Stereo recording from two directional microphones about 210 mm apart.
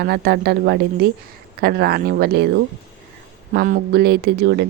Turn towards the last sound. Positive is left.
turn(degrees=-50)  # may be behind; listen again after turning